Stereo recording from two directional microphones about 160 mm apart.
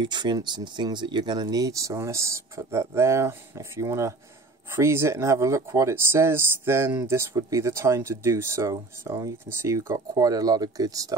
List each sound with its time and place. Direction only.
0.0 s speech: 30° right (ahead or behind)